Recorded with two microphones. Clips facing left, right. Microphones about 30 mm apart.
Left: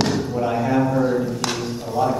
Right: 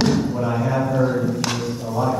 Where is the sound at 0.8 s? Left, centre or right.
Centre.